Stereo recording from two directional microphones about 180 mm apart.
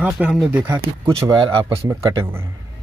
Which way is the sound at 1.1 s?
20° right (ahead or behind).